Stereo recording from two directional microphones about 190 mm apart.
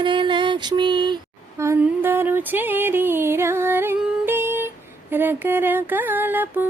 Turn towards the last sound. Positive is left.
turn(degrees=-10)  # may be behind; listen again after turning